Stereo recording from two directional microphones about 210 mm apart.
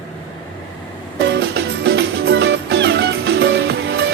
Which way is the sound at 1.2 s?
50° right (ahead or behind).